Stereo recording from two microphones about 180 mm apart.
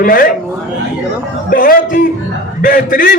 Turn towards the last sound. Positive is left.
turn(degrees=50)  # may be behind; listen again after turning